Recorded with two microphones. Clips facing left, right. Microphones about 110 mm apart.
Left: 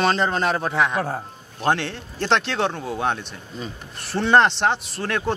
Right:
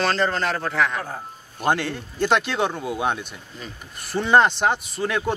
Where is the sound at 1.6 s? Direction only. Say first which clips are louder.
Even; 5° right (ahead or behind).